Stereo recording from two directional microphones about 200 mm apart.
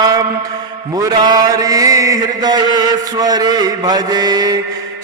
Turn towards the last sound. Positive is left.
turn(degrees=-20)  # may be behind; listen again after turning